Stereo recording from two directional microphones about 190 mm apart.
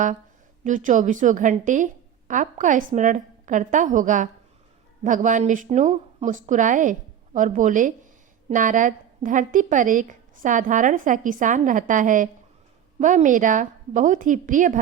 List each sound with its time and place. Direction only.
0.6 s a woman's voice: 40° right (ahead or behind)